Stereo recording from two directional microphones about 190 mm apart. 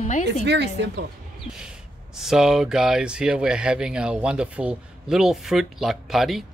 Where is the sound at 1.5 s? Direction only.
5° right (ahead or behind).